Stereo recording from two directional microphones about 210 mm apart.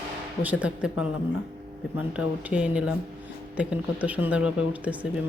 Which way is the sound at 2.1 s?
5° right (ahead or behind).